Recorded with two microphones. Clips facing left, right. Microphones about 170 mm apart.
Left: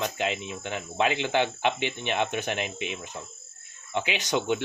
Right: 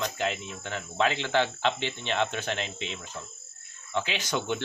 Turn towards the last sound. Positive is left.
turn(degrees=15)  # may be behind; listen again after turning